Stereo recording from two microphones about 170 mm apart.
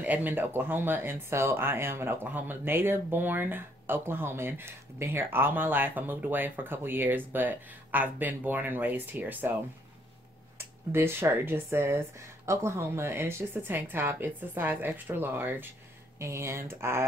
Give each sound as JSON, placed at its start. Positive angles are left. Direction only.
{"t": 0.0, "sound": "speech", "side_deg": -10}
{"t": 10.6, "sound": "speech", "side_deg": -15}